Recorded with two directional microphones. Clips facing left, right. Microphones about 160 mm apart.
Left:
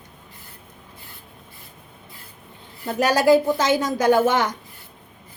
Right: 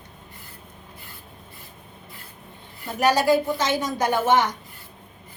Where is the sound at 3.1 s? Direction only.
90° left.